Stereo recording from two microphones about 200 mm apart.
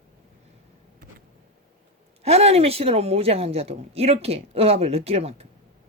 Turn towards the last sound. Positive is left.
turn(degrees=-30)  # may be behind; listen again after turning